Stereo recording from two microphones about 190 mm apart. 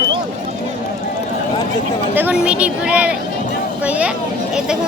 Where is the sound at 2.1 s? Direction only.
5° right (ahead or behind).